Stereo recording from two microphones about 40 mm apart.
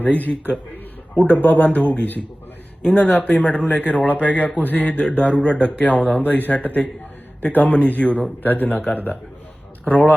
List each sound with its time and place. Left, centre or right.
0.0 s speech: left
4.2 s speech: left
5.2 s speech: left
5.5 s speech: left
9.8 s speech: left